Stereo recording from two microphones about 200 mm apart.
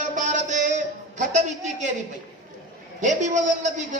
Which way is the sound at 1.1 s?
35° right (ahead or behind).